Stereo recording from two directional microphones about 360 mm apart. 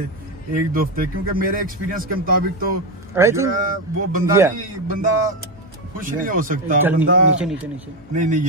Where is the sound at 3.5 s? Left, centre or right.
Right.